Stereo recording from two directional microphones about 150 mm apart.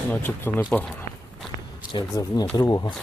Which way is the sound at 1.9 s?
25° left (ahead or behind).